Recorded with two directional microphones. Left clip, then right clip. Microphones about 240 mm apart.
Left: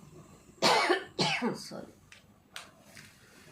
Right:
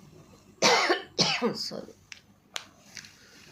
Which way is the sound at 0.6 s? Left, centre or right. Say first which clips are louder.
Right 3 dB; right.